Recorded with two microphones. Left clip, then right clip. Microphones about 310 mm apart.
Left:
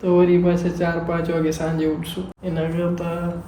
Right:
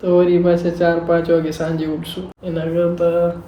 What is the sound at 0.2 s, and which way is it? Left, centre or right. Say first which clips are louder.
A woman's voice: right 4 dB; centre.